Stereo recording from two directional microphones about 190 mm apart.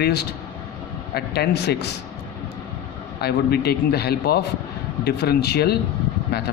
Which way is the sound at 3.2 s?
55° left (ahead or behind).